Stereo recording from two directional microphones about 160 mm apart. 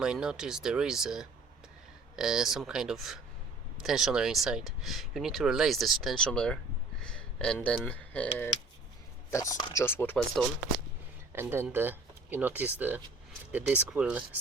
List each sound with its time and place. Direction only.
0.0 s speech: 5° right (ahead or behind)
9.3 s speech: 20° left (ahead or behind)
10.4 s speech: centre (ahead or behind)
11.3 s speech: 15° right (ahead or behind)